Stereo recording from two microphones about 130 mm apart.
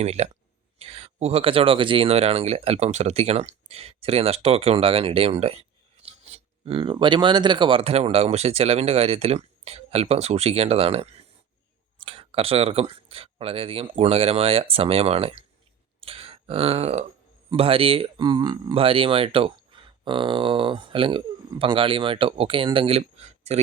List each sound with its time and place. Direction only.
0.0 s speech: 55° right (ahead or behind)
16.0 s burping: 45° right (ahead or behind)
17.6 s speech: 45° right (ahead or behind)